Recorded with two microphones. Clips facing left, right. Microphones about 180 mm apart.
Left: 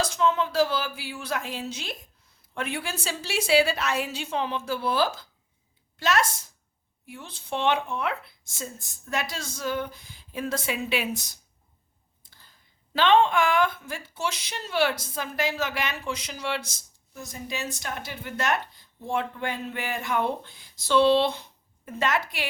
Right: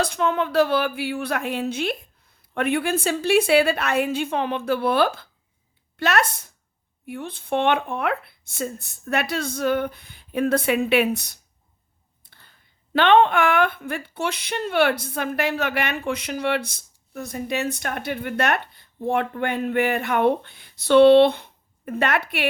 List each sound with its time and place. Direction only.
0.0 s speech: 60° right (ahead or behind)